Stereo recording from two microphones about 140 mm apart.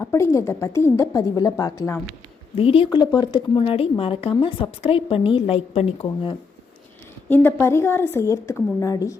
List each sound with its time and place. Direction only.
0.0 s a woman's voice: 20° left (ahead or behind)
2.6 s a woman's voice: 40° left (ahead or behind)
7.3 s a woman's voice: 15° left (ahead or behind)